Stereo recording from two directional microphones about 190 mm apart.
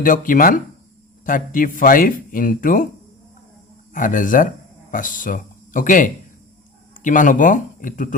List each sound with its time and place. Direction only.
0.0 s speech: 45° left (ahead or behind)
3.9 s speech: 45° left (ahead or behind)